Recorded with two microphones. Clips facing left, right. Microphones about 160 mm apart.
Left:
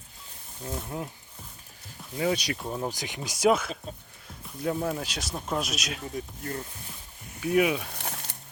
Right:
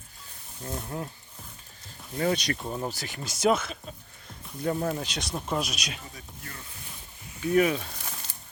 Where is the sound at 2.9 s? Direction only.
15° left (ahead or behind); by 6.0 s centre (ahead or behind).